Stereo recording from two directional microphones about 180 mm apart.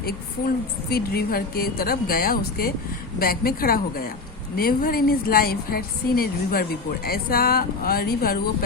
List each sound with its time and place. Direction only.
0.0 s a woman's voice: 55° left (ahead or behind)